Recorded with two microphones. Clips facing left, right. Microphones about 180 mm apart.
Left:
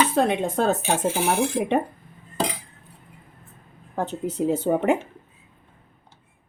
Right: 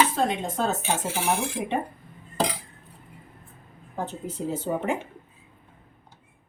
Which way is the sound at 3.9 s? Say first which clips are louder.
Left 6 dB; 65° left (ahead or behind).